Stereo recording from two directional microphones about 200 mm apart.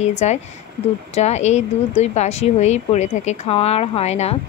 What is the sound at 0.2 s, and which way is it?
Speech, 35° left (ahead or behind).